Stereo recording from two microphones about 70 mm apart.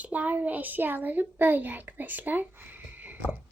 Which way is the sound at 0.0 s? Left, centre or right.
Right.